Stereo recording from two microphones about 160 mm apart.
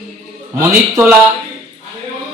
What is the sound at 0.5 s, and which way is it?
Speech, 15° right (ahead or behind).